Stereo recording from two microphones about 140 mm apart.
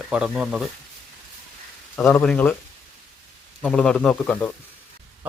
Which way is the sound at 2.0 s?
5° left (ahead or behind).